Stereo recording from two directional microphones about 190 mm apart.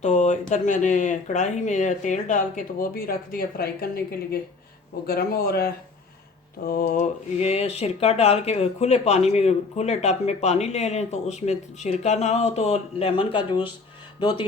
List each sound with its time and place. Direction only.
0.0 s speech: 40° left (ahead or behind); by 5.6 s 55° left (ahead or behind)
6.7 s speech: 45° left (ahead or behind); by 14.4 s 20° left (ahead or behind)